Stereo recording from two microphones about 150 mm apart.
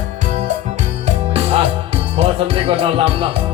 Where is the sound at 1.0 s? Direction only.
45° right (ahead or behind).